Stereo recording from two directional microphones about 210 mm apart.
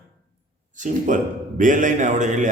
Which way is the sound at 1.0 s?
40° right (ahead or behind).